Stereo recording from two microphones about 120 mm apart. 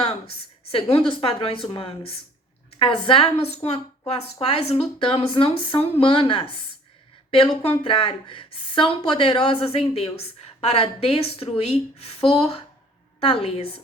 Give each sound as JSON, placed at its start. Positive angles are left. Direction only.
{"t": 0.0, "sound": "a woman's voice", "side_deg": 55}